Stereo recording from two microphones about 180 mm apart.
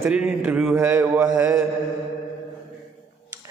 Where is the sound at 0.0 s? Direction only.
5° right (ahead or behind).